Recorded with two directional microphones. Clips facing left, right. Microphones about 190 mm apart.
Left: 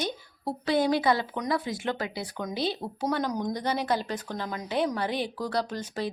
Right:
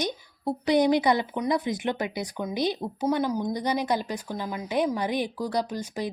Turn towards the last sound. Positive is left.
turn(degrees=-10)  # may be behind; listen again after turning